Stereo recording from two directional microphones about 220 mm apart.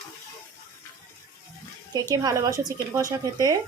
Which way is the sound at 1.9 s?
15° right (ahead or behind).